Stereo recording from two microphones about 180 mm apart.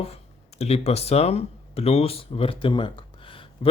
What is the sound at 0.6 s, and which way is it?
Speech, 35° left (ahead or behind).